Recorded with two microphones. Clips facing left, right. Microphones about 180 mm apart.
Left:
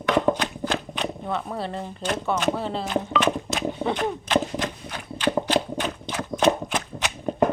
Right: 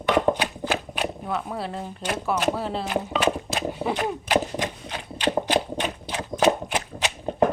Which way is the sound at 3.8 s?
10° right (ahead or behind).